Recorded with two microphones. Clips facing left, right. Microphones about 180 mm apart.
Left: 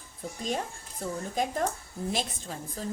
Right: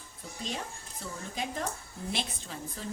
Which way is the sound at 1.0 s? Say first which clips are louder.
Left 7 dB; 45° left (ahead or behind).